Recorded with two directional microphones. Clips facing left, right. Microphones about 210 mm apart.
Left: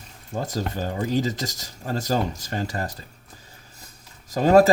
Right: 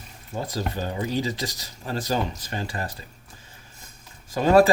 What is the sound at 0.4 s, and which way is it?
Speech, 45° left (ahead or behind).